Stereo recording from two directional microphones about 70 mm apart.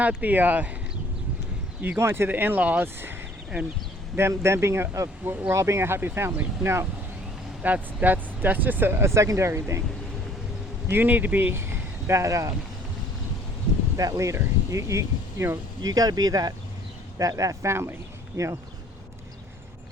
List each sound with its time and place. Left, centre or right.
0.0 s speech: right
2.0 s speech: right
2.8 s speech: right
4.2 s speech: right
7.6 s speech: right
10.8 s speech: right
13.9 s speech: right
15.8 s speech: right